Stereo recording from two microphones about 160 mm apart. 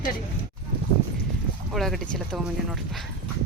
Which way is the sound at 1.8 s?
Centre (ahead or behind).